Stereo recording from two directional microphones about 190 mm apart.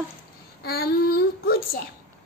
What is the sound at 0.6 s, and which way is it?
A child's voice, 55° left (ahead or behind).